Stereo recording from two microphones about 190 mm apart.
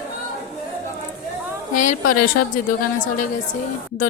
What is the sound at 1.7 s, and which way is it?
A woman's voice, 45° left (ahead or behind).